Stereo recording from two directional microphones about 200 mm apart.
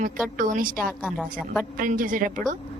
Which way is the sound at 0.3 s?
40° right (ahead or behind).